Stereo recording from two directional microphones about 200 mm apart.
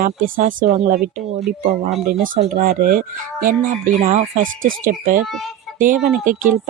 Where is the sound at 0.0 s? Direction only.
45° right (ahead or behind).